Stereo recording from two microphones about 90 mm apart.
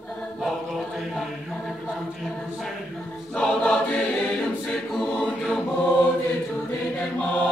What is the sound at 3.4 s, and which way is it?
Choir, 10° left (ahead or behind).